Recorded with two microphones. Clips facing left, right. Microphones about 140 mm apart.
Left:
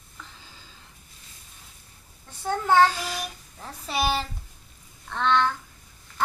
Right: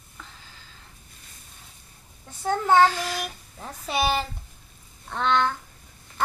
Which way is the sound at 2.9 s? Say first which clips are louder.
Right 3 dB; 15° left (ahead or behind).